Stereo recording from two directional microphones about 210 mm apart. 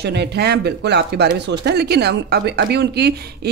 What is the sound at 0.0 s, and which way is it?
Speech, 55° right (ahead or behind).